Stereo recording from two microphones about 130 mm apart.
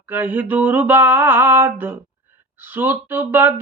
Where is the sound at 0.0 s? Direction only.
15° right (ahead or behind).